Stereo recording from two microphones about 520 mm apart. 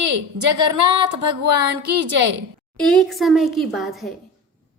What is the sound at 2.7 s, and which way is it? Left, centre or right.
A woman's voice, centre.